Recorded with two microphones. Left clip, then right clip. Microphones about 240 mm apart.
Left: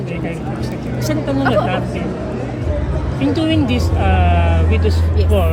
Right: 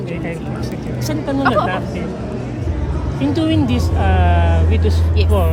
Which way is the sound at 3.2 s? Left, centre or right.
Right.